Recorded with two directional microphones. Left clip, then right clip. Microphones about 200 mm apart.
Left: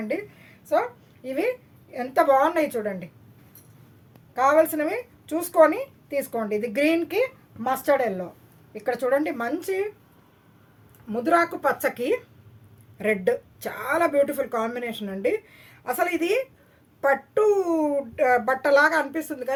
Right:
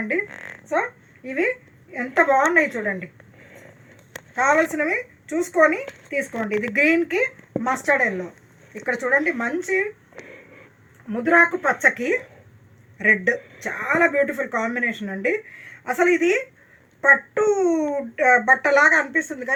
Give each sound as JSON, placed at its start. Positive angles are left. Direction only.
{"t": 1.2, "sound": "speech", "side_deg": 25}
{"t": 2.3, "sound": "speech", "side_deg": 35}
{"t": 4.4, "sound": "speech", "side_deg": 40}
{"t": 11.1, "sound": "speech", "side_deg": 25}
{"t": 13.0, "sound": "speech", "side_deg": 50}